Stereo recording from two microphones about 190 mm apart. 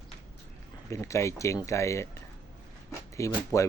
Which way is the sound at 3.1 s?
15° left (ahead or behind).